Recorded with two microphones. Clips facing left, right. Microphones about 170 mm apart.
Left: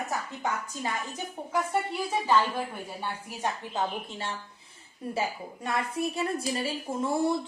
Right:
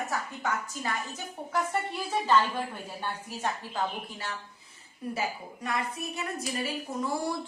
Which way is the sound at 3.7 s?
25° left (ahead or behind).